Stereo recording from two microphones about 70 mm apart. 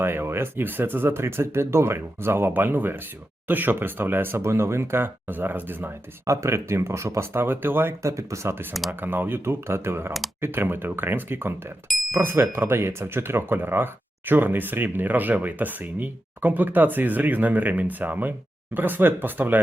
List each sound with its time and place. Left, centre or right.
0.0 s speech: right
6.2 s speech: right
8.0 s speech: right
8.9 s speech: right